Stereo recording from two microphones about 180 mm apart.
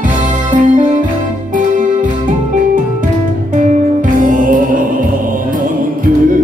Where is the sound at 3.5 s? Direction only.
45° right (ahead or behind).